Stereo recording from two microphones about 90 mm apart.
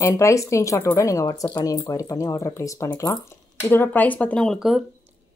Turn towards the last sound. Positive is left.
turn(degrees=-5)  # may be behind; listen again after turning